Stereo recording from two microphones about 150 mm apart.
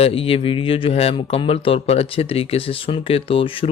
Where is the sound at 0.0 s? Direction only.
40° left (ahead or behind).